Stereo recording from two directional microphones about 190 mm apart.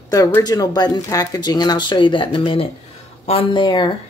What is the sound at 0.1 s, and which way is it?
Speech, 20° left (ahead or behind).